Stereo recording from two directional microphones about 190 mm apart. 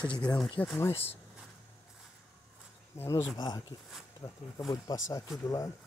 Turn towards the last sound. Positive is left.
turn(degrees=15)  # may be behind; listen again after turning